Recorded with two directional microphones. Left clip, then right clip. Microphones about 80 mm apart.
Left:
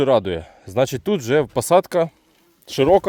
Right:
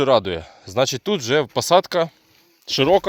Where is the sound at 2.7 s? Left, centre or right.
Left.